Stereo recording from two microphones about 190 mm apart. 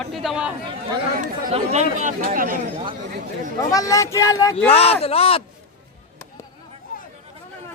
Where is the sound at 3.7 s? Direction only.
15° left (ahead or behind).